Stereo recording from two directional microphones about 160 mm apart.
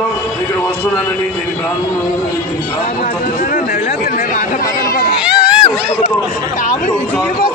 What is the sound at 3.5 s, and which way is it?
Chatter, 60° left (ahead or behind).